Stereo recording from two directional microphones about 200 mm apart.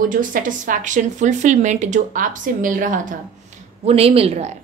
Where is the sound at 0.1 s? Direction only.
40° right (ahead or behind).